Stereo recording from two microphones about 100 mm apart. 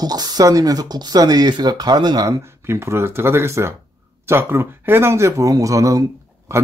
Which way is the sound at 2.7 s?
25° right (ahead or behind).